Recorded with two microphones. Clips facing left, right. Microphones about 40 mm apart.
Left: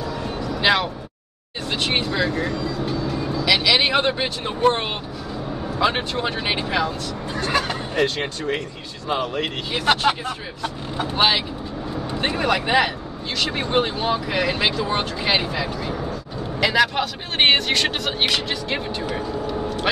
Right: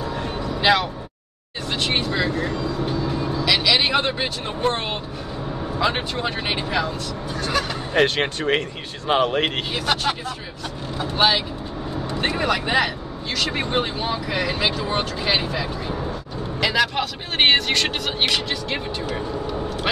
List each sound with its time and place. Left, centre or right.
0.0 s vehicle: right
0.6 s speech: centre
2.4 s vehicle: right
3.4 s speech: centre
5.8 s speech: centre
7.5 s speech: left
7.9 s speech: right
9.8 s speech: left
11.1 s speech: centre